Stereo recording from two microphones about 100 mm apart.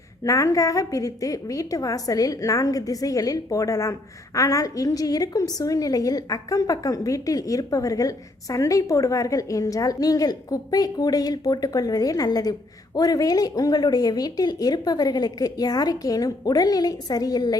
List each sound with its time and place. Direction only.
0.3 s a woman's voice: 35° left (ahead or behind)